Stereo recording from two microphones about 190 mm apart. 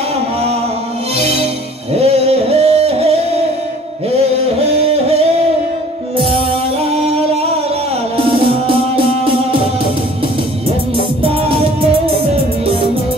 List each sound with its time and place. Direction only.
1.1 s music: 35° right (ahead or behind)
4.2 s music: 30° right (ahead or behind)
6.8 s music: 35° right (ahead or behind)